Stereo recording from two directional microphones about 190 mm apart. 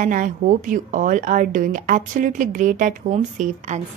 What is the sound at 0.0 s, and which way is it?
A woman's voice, 45° right (ahead or behind).